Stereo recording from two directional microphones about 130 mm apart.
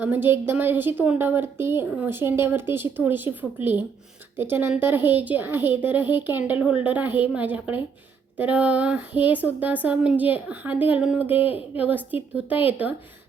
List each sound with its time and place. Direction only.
0.0 s a woman's voice: 15° right (ahead or behind)
12.6 s a woman's voice: 10° right (ahead or behind)